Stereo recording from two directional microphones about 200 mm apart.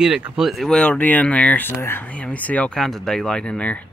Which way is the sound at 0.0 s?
5° right (ahead or behind).